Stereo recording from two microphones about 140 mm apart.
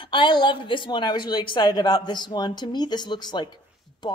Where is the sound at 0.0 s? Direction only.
35° left (ahead or behind).